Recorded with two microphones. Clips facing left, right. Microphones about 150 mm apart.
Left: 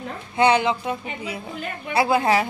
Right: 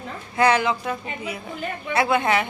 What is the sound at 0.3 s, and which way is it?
A man's voice, 25° left (ahead or behind).